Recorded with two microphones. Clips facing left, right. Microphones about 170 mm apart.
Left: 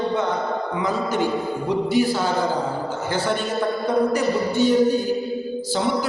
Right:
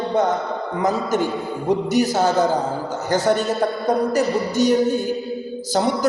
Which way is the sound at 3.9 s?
40° right (ahead or behind).